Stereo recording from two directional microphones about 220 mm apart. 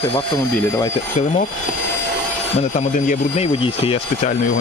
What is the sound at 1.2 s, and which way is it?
Speech, 35° left (ahead or behind).